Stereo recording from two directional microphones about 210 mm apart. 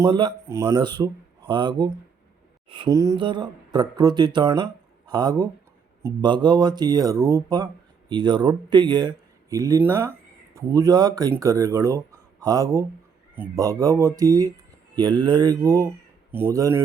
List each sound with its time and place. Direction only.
0.0 s speech: 20° right (ahead or behind)